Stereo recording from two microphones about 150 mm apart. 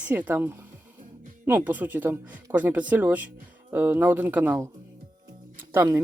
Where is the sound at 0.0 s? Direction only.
10° right (ahead or behind).